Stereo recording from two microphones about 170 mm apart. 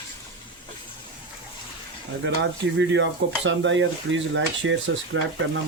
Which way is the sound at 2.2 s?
90° right.